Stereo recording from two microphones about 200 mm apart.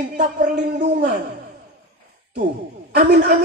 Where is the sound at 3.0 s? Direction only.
45° right (ahead or behind).